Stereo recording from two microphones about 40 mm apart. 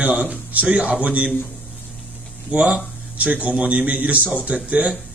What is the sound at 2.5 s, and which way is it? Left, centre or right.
Speech, right.